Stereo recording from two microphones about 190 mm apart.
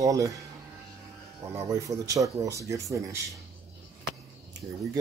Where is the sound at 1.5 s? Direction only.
15° right (ahead or behind).